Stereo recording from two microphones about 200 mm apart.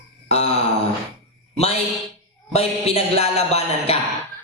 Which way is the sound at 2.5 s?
30° left (ahead or behind).